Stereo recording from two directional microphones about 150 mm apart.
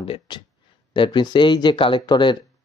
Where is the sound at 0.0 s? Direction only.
40° left (ahead or behind).